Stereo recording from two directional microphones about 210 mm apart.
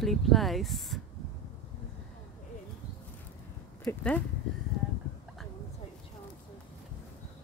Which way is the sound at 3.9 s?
10° left (ahead or behind).